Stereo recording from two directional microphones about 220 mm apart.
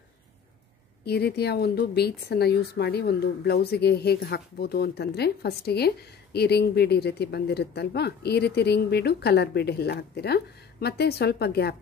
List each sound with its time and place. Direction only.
1.0 s speech: 45° left (ahead or behind)